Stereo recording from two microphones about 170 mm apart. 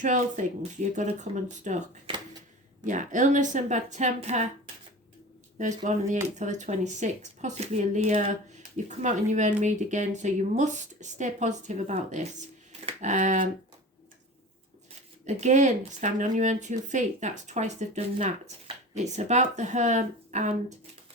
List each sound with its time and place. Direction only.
0.0 s speech: 45° right (ahead or behind)
2.8 s speech: 45° right (ahead or behind)
5.5 s speech: 45° right (ahead or behind)
15.3 s speech: 45° right (ahead or behind)